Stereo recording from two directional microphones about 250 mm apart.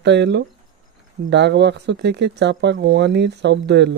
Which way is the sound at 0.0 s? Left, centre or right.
Right.